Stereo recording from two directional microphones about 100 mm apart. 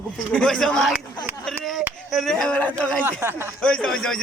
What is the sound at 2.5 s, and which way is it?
Speech, 15° left (ahead or behind).